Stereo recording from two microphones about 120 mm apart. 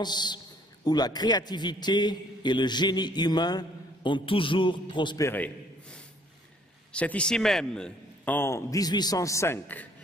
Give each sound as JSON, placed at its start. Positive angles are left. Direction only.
{"t": 0.0, "sound": "a man's voice", "side_deg": 35}
{"t": 5.2, "sound": "a man's voice", "side_deg": 15}
{"t": 8.4, "sound": "a man's voice", "side_deg": 25}